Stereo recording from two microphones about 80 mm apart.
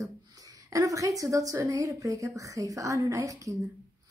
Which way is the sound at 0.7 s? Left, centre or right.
Right.